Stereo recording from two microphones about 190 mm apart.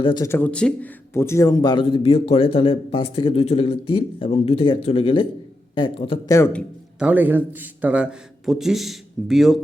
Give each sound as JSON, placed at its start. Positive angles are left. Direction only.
{"t": 0.0, "sound": "a man's voice", "side_deg": 25}
{"t": 0.3, "sound": "a man's voice", "side_deg": 10}
{"t": 7.0, "sound": "a man's voice", "side_deg": -10}